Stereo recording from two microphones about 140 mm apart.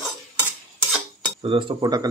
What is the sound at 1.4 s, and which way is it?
Speech, 40° right (ahead or behind).